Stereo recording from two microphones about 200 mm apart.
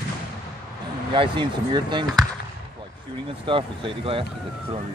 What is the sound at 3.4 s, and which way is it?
Speech, 25° right (ahead or behind).